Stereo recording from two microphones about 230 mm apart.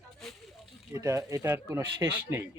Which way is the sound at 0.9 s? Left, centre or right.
Centre.